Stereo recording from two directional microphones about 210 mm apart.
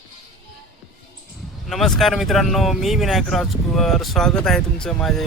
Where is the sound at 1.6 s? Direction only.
Centre (ahead or behind).